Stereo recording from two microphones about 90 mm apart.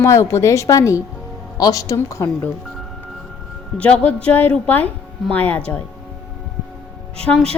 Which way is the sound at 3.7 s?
15° left (ahead or behind).